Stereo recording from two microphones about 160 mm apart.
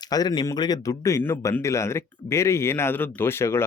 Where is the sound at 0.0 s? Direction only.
25° left (ahead or behind).